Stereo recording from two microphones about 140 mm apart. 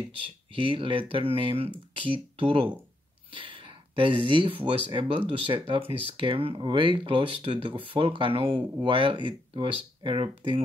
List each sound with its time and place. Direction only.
0.5 s speech: 40° right (ahead or behind)